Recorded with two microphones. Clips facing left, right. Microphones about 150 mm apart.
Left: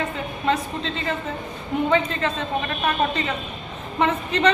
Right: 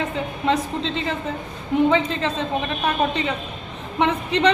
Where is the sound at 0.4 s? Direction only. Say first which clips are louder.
Right 1 dB; 20° right (ahead or behind).